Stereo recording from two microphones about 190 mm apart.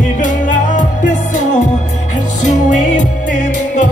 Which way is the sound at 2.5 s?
40° left (ahead or behind).